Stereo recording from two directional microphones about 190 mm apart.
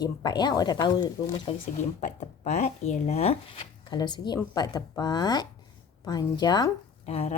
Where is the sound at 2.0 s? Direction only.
40° left (ahead or behind).